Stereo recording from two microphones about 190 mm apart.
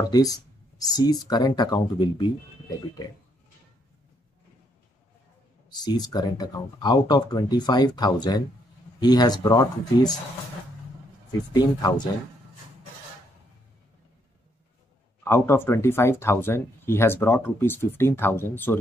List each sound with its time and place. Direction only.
0.1 s speech: 20° left (ahead or behind)
5.7 s speech: 20° left (ahead or behind)
11.5 s speech: 20° left (ahead or behind)
15.2 s speech: 15° left (ahead or behind)